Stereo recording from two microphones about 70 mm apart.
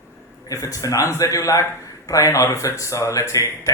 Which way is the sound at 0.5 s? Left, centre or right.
Left.